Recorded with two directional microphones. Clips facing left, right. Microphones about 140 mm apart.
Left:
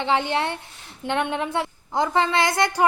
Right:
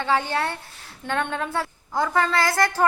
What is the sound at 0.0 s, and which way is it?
A woman's voice, 20° left (ahead or behind).